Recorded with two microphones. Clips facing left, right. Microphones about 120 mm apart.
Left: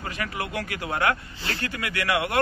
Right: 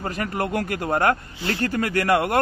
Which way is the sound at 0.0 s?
45° right (ahead or behind).